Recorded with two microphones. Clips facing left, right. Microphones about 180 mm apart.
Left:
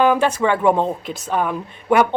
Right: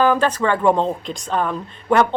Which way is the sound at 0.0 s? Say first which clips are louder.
Left 1 dB; 10° left (ahead or behind).